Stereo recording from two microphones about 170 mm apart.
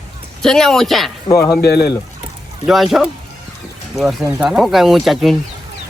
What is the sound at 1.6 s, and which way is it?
Speech, 70° left (ahead or behind).